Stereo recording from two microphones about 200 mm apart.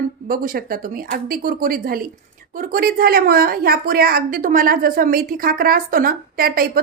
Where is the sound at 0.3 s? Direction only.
45° right (ahead or behind).